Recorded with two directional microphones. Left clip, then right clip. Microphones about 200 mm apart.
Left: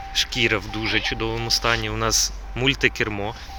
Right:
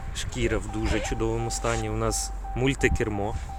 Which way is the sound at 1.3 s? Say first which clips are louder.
Left 7 dB; 5° right (ahead or behind).